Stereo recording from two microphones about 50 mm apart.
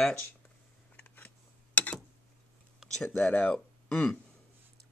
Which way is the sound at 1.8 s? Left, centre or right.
Left.